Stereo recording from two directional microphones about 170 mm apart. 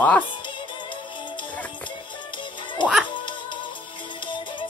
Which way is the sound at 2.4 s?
30° left (ahead or behind).